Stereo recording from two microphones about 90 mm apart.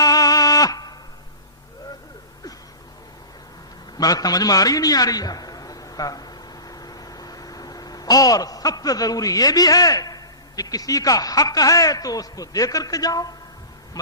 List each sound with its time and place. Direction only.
0.0 s music: 40° left (ahead or behind)
3.9 s a man's voice: 45° left (ahead or behind)